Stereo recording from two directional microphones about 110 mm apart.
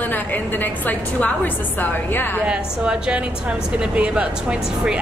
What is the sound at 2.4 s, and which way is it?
A woman's voice, 10° right (ahead or behind).